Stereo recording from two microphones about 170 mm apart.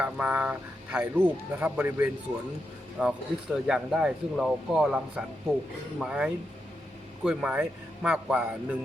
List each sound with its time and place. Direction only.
0.0 s speech: 10° right (ahead or behind)